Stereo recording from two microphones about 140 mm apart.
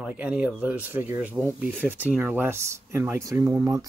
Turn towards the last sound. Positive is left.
turn(degrees=-20)  # may be behind; listen again after turning